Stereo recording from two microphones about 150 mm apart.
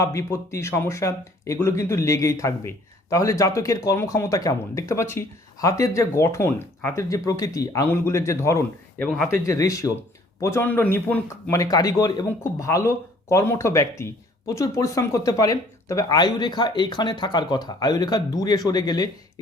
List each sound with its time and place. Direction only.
0.0 s speech: 20° left (ahead or behind)
9.1 s speech: 10° left (ahead or behind)
9.5 s speech: 20° left (ahead or behind)